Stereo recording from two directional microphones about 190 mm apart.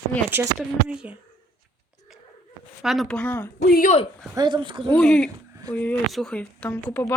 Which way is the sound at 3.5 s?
55° left (ahead or behind).